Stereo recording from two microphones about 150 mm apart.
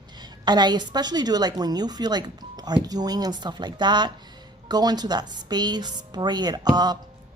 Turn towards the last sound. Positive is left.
turn(degrees=-25)  # may be behind; listen again after turning